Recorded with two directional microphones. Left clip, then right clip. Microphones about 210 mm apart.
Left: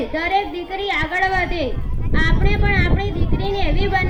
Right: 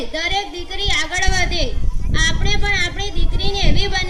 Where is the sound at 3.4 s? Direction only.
35° right (ahead or behind).